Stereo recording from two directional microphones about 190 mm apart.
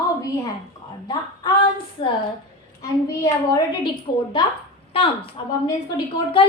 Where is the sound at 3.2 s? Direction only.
20° left (ahead or behind).